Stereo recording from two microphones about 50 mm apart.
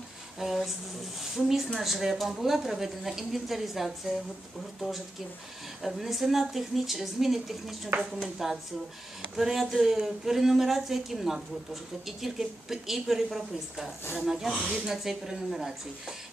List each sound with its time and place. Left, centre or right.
0.4 s a woman's voice: centre
5.8 s a woman's voice: centre
15.0 s a woman's voice: centre